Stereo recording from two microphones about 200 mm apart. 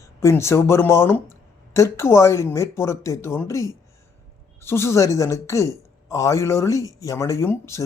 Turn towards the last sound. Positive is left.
turn(degrees=15)  # may be behind; listen again after turning